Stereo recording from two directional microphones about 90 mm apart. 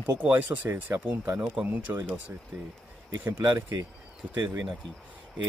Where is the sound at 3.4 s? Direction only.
35° right (ahead or behind).